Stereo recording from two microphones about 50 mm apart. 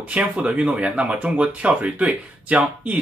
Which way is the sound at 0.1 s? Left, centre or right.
Right.